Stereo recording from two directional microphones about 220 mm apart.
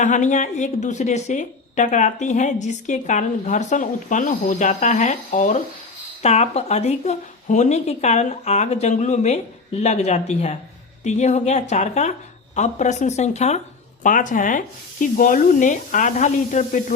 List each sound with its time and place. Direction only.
0.0 s a woman's voice: 35° left (ahead or behind)